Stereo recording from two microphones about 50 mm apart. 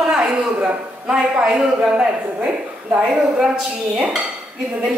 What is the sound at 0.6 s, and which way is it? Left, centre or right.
A man's voice, right.